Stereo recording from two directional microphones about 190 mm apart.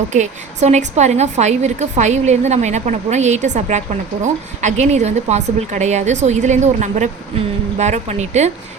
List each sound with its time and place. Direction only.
0.1 s a woman's voice: 40° right (ahead or behind)